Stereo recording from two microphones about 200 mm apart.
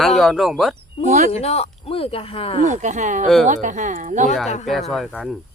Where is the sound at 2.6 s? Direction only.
40° right (ahead or behind).